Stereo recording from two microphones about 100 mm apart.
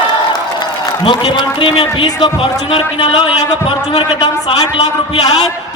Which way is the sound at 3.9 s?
45° left (ahead or behind).